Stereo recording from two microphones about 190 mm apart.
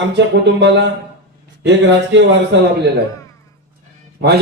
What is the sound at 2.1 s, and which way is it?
Speech, 75° right (ahead or behind).